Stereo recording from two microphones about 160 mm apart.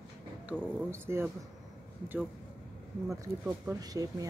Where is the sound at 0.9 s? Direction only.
15° right (ahead or behind).